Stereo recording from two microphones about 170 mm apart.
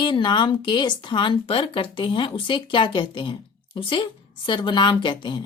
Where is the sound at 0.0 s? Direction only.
30° left (ahead or behind).